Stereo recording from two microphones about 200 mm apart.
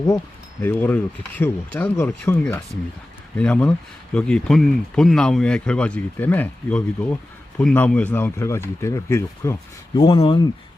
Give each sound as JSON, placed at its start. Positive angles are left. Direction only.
{"t": 0.6, "sound": "speech", "side_deg": 10}
{"t": 10.0, "sound": "speech", "side_deg": 25}